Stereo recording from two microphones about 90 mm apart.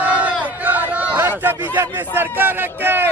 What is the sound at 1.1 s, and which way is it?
A man's voice, 25° right (ahead or behind).